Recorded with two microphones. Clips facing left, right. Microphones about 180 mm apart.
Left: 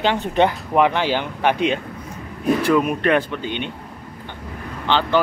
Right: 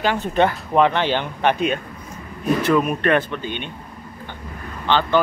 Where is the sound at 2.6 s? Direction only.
10° left (ahead or behind).